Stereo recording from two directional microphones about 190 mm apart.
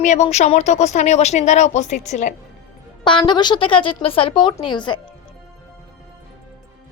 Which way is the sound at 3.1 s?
25° left (ahead or behind).